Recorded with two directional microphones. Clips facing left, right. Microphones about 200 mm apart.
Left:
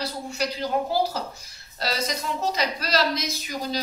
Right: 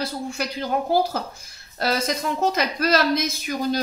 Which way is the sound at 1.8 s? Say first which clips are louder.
Right 5 dB; 55° right (ahead or behind).